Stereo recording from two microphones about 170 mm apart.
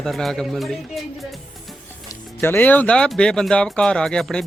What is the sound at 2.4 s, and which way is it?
Speech, 10° left (ahead or behind).